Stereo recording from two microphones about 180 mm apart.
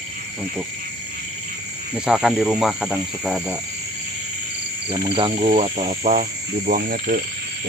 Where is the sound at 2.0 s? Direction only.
5° right (ahead or behind).